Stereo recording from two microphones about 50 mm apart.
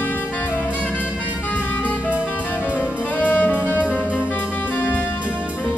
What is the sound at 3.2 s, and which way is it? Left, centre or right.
Music, left.